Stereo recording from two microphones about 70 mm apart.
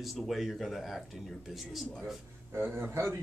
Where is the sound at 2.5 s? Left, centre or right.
Right.